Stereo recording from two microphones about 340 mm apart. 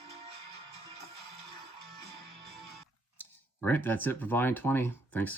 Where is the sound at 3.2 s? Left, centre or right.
Centre.